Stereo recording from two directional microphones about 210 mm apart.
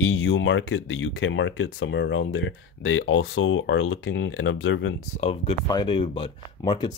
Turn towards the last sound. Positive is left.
turn(degrees=20)  # may be behind; listen again after turning